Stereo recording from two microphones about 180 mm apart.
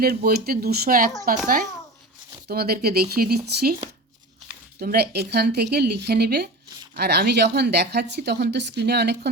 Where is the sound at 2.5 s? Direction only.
60° right (ahead or behind).